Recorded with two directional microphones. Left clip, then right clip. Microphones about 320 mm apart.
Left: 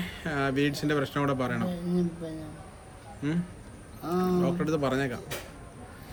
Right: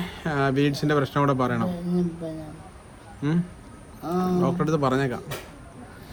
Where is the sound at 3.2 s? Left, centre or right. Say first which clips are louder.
Right 4 dB; centre.